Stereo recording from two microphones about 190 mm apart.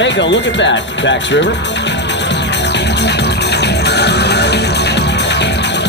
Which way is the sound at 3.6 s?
60° left (ahead or behind).